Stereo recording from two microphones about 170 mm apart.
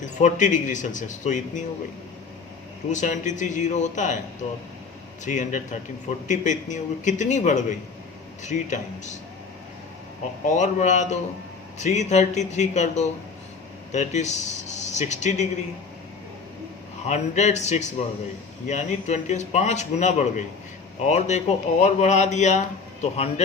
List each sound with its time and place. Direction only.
0.0 s a man's voice: 45° left (ahead or behind)
2.9 s a man's voice: 45° left (ahead or behind)
10.4 s a man's voice: 45° left (ahead or behind)
17.1 s a man's voice: 45° left (ahead or behind)